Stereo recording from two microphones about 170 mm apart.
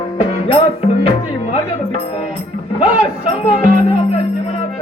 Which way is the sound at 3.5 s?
35° left (ahead or behind).